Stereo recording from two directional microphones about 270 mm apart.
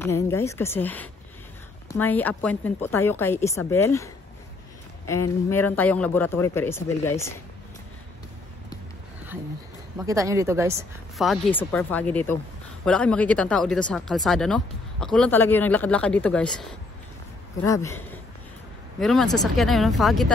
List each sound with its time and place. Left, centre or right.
0.0 s a man's voice: centre
9.9 s speech: centre
11.1 s a man's voice: centre